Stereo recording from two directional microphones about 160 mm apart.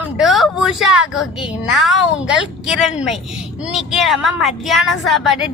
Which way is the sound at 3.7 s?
Centre (ahead or behind).